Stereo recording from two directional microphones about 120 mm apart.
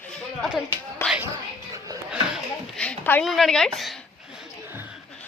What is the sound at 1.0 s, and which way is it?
Music, 20° left (ahead or behind).